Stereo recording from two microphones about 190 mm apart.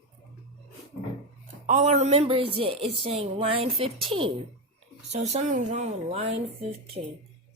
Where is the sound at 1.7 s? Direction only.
40° right (ahead or behind).